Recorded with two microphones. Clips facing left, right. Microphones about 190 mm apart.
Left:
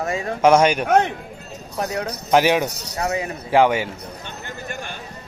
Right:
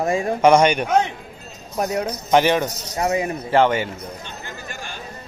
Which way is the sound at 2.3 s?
10° left (ahead or behind).